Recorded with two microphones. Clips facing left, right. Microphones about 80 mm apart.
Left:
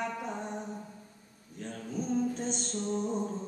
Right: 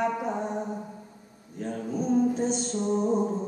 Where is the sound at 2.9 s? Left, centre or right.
Right.